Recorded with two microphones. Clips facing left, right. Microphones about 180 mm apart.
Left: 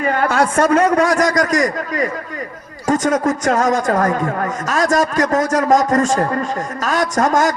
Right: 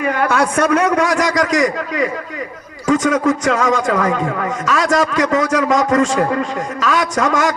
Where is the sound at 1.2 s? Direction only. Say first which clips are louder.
Even; 40° left (ahead or behind).